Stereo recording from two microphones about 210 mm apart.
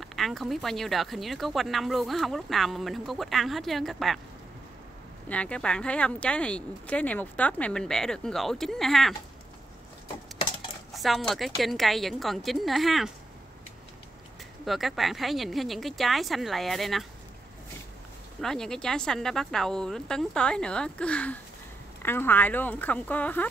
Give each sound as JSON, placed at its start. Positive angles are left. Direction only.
{"t": 0.0, "sound": "speech", "side_deg": 0}
{"t": 5.3, "sound": "speech", "side_deg": 5}
{"t": 11.0, "sound": "speech", "side_deg": 0}
{"t": 14.6, "sound": "speech", "side_deg": 0}
{"t": 18.4, "sound": "speech", "side_deg": 0}